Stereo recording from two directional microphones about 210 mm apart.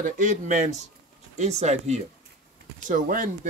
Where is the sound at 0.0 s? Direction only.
35° right (ahead or behind).